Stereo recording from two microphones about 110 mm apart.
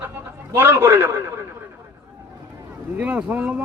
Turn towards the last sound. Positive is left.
turn(degrees=-15)  # may be behind; listen again after turning